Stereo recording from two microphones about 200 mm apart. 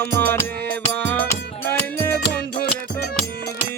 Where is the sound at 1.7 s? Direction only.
10° left (ahead or behind).